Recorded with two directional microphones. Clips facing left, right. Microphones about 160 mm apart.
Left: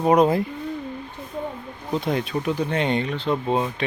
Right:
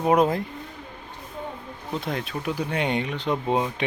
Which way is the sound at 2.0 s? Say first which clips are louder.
Left 6 dB; centre (ahead or behind).